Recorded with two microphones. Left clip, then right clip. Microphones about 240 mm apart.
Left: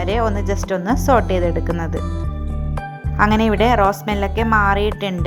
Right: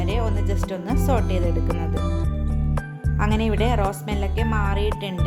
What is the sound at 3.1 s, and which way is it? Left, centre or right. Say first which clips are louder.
A woman's voice: left 9 dB; centre.